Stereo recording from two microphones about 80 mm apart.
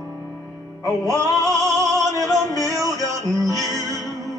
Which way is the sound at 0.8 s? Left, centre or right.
Right.